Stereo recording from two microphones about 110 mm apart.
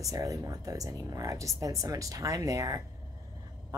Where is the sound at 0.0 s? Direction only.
35° right (ahead or behind).